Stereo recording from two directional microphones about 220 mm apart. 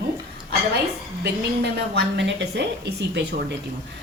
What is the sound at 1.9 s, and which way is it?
A woman's voice, 50° right (ahead or behind).